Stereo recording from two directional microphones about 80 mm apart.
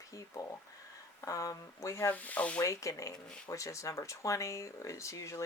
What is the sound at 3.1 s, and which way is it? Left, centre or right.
Speech, centre.